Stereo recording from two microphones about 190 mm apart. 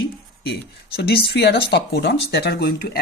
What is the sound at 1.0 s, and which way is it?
Speech, 60° left (ahead or behind).